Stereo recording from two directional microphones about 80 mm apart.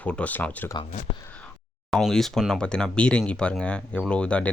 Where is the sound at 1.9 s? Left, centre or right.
Centre.